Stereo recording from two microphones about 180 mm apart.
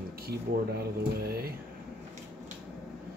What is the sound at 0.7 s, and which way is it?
Speech, 60° right (ahead or behind).